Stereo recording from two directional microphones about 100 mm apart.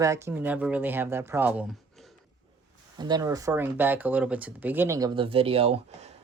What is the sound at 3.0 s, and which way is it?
Speech, 40° right (ahead or behind).